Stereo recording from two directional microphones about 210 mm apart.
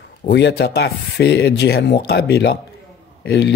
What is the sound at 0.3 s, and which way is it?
Speech, 55° left (ahead or behind).